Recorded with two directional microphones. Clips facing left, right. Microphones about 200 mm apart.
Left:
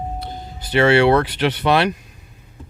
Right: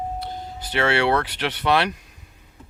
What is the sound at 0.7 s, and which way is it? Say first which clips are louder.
Speech: left 7 dB; 15° left (ahead or behind).